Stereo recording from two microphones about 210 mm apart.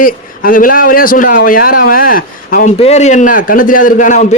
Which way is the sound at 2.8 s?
30° left (ahead or behind).